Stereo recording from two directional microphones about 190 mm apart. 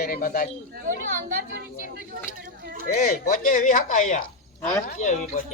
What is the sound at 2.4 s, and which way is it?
Speech, 50° right (ahead or behind).